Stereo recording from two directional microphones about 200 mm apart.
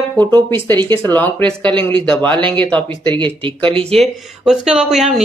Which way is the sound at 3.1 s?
25° right (ahead or behind).